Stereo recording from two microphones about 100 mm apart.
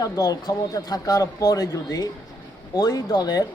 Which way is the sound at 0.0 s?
40° left (ahead or behind).